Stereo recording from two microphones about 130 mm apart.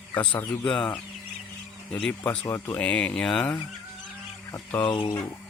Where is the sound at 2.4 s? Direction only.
20° left (ahead or behind).